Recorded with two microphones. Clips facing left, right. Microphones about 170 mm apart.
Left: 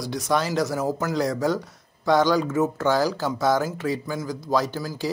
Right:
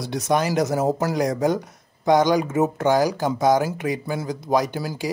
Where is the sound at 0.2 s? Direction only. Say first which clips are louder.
Right 3 dB; 20° right (ahead or behind).